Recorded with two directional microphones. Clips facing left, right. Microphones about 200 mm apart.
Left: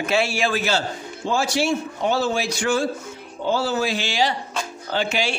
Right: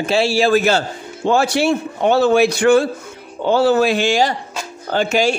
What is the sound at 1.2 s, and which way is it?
A man's voice, 60° right (ahead or behind).